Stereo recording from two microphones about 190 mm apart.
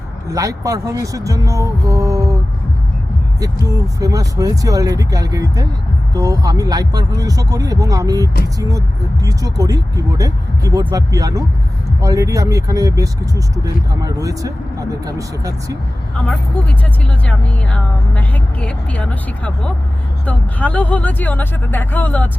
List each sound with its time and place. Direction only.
0.3 s speech: 15° right (ahead or behind)
3.7 s speech: 20° right (ahead or behind)
17.2 s speech: 5° left (ahead or behind)